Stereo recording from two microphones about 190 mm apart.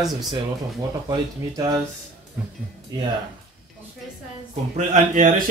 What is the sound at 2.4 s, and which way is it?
Speech, 10° right (ahead or behind).